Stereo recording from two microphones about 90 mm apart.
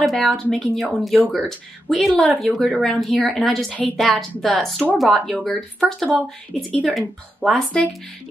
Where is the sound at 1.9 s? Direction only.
Centre (ahead or behind).